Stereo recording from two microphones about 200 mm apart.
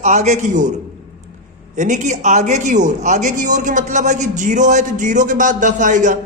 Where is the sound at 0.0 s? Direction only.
35° right (ahead or behind).